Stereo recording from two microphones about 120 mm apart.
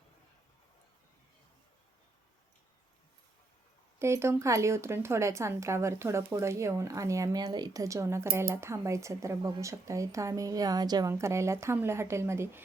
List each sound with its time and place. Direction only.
4.0 s speech: 20° right (ahead or behind)